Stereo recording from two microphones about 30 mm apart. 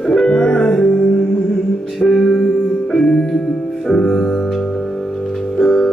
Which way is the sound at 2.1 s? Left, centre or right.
Centre.